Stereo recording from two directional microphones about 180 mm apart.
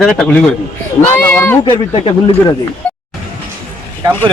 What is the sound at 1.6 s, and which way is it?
Speech, 30° left (ahead or behind).